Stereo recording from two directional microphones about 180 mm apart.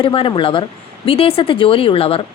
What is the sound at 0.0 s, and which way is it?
A woman's voice, 30° left (ahead or behind).